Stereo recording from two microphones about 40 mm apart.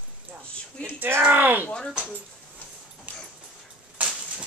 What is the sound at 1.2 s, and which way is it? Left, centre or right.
Speech, right.